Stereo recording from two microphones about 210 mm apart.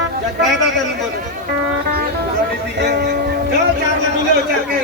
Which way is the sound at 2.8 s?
50° right (ahead or behind).